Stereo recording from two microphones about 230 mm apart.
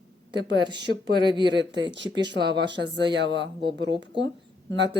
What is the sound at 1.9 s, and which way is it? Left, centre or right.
Speech, right.